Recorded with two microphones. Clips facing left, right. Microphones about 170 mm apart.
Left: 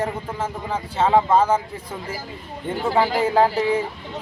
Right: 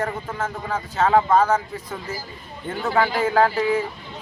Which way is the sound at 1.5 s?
10° left (ahead or behind).